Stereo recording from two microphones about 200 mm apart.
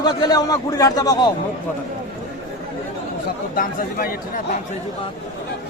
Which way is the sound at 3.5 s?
45° left (ahead or behind).